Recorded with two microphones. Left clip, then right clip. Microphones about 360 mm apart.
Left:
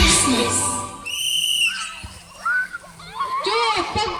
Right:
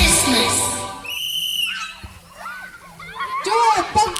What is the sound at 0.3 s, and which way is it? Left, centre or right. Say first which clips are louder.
Music: right 2 dB; right.